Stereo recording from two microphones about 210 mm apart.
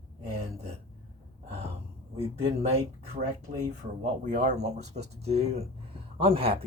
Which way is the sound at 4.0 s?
35° right (ahead or behind).